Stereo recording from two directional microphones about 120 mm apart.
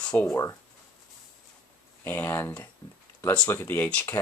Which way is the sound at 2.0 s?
20° left (ahead or behind).